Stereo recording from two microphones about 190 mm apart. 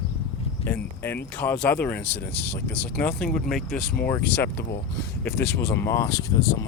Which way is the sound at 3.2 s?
50° left (ahead or behind).